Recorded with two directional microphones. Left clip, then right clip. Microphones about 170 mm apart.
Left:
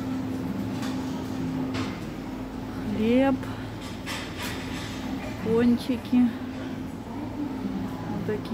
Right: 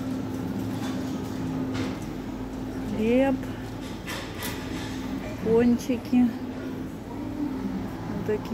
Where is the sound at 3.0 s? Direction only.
20° left (ahead or behind).